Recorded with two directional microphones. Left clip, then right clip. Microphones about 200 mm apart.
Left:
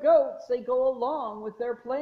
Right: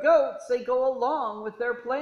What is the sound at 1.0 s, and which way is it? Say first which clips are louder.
Speech: right 3 dB; 25° right (ahead or behind).